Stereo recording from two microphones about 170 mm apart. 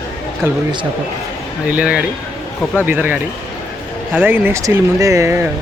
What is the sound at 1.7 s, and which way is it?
Speech, 5° right (ahead or behind).